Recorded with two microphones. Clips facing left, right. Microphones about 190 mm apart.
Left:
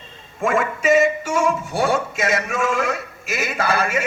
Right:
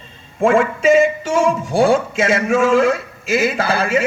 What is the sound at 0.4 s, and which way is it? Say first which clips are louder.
A man's voice: right 5 dB; 30° right (ahead or behind).